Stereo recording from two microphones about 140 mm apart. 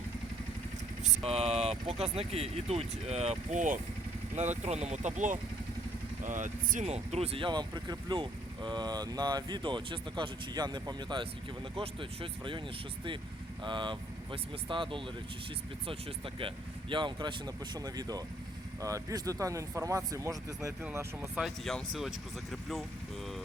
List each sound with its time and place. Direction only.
1.0 s speech: 50° right (ahead or behind)
13.7 s speech: 35° right (ahead or behind); by 21.1 s 20° right (ahead or behind)
21.3 s speech: centre (ahead or behind)